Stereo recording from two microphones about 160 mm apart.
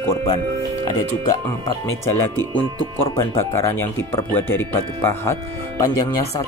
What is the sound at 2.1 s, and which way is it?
Speech, 15° left (ahead or behind).